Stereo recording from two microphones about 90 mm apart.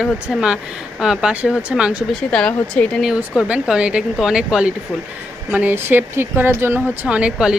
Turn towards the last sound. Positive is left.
turn(degrees=-10)  # may be behind; listen again after turning